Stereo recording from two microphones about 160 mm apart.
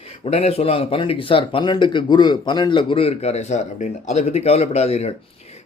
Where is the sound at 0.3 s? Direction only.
40° left (ahead or behind).